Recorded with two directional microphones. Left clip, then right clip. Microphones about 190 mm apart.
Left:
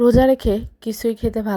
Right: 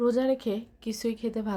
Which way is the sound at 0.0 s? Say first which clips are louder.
Left 11 dB; 30° left (ahead or behind).